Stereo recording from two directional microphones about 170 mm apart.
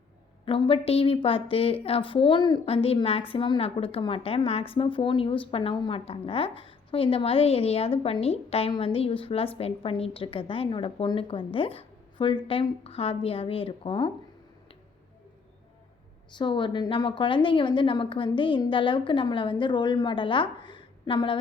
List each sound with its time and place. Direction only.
0.4 s a woman's voice: 30° left (ahead or behind)
16.3 s a woman's voice: 30° left (ahead or behind)